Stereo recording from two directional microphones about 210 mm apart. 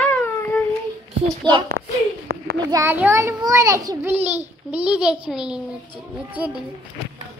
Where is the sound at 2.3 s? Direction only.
50° right (ahead or behind).